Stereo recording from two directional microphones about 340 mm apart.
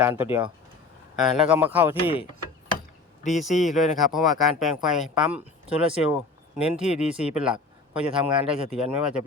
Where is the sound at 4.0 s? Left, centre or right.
Centre.